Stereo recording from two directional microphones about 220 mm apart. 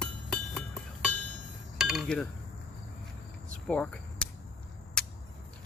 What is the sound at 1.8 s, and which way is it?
Cutlery, centre (ahead or behind).